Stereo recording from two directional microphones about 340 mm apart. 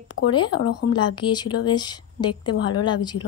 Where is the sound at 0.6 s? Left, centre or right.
Left.